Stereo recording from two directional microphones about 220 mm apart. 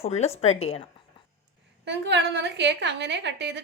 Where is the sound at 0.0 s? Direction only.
30° left (ahead or behind).